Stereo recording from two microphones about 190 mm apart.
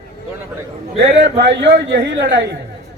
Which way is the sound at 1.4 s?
65° right (ahead or behind).